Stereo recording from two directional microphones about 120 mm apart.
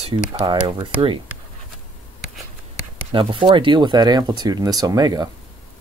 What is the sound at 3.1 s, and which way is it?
Speech, 45° right (ahead or behind).